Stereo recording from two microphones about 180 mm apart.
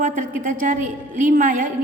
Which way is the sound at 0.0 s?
45° right (ahead or behind).